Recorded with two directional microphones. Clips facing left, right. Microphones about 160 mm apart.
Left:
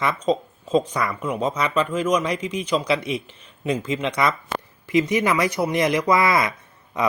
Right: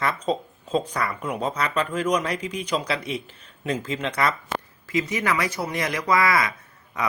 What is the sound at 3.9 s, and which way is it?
Speech, 10° left (ahead or behind).